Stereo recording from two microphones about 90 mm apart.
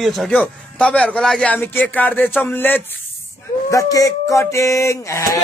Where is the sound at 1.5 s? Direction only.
20° left (ahead or behind).